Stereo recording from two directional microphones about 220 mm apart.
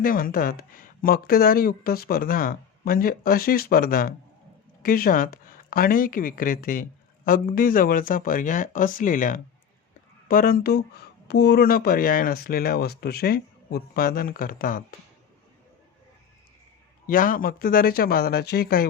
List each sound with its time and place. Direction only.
0.0 s speech: 40° left (ahead or behind)
17.1 s speech: 40° left (ahead or behind)